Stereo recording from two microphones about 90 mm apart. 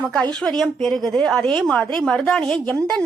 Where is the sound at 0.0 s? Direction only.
10° left (ahead or behind).